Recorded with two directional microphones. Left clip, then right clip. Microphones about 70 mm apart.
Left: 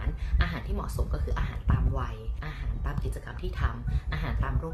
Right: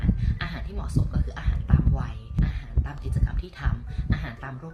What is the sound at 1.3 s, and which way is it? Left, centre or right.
Speech, left.